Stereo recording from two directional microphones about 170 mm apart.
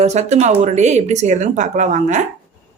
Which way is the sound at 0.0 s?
40° right (ahead or behind).